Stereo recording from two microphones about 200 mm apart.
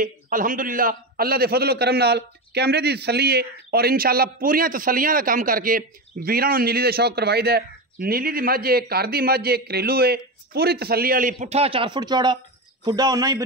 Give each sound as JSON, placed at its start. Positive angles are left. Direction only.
{"t": 0.0, "sound": "a man's voice", "side_deg": -45}